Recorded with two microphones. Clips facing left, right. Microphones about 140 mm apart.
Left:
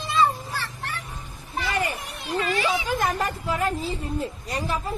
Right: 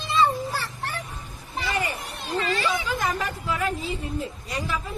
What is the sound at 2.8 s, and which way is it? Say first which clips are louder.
A woman's voice: left 2 dB; 45° left (ahead or behind).